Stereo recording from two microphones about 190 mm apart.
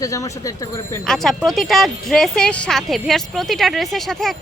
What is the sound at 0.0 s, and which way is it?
Speech, 15° left (ahead or behind).